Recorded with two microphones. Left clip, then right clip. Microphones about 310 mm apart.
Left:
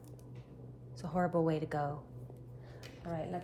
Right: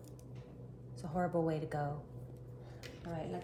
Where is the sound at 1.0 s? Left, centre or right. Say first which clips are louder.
Left 3 dB; left.